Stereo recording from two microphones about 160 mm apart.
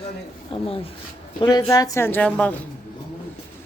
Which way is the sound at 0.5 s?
35° left (ahead or behind).